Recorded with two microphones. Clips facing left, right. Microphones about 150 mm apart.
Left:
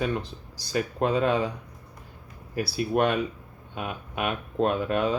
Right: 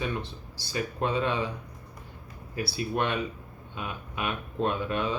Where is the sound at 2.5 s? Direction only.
45° left (ahead or behind).